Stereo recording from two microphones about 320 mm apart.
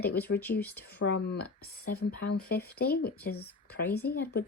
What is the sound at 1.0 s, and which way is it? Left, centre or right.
Speech, left.